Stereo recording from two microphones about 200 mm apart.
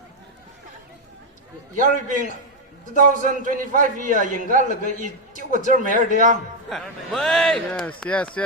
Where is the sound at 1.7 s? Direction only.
40° right (ahead or behind).